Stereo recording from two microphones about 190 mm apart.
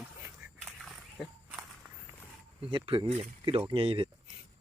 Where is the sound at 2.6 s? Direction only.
25° right (ahead or behind).